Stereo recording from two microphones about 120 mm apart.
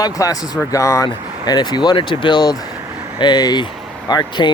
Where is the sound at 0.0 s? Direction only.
30° left (ahead or behind).